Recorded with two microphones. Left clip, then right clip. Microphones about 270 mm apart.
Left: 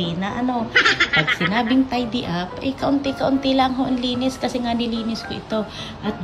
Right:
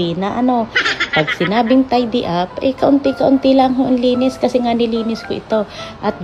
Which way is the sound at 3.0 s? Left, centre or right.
Centre.